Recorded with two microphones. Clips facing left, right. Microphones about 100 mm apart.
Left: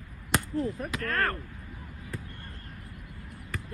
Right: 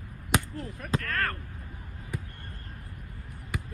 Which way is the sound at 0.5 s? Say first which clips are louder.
Left 3 dB; 35° left (ahead or behind).